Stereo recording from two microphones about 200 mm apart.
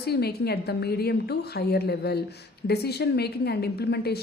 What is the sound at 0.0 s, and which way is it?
A woman's voice, 55° left (ahead or behind).